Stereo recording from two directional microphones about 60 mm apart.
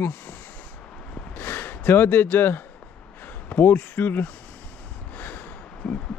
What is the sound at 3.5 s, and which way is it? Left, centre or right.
Speech, left.